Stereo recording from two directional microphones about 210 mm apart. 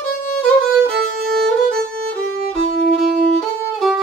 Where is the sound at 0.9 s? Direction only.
50° right (ahead or behind).